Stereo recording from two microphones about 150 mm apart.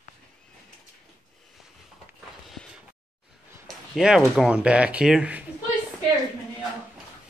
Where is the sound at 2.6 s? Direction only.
5° left (ahead or behind).